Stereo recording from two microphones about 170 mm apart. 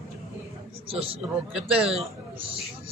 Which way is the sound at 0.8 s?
35° right (ahead or behind).